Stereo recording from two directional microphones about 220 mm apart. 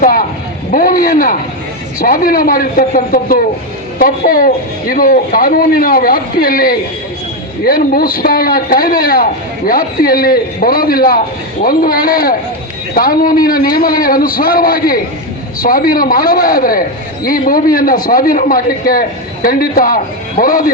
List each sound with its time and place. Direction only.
0.0 s a man's voice: 40° left (ahead or behind)